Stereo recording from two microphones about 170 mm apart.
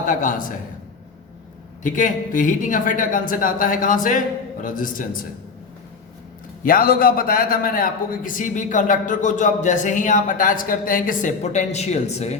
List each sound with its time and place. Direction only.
0.1 s a man's voice: 50° left (ahead or behind)
1.8 s a man's voice: 50° left (ahead or behind)
6.6 s a man's voice: 55° left (ahead or behind)